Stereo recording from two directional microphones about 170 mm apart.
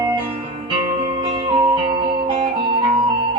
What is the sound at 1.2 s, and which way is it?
Music, 30° right (ahead or behind).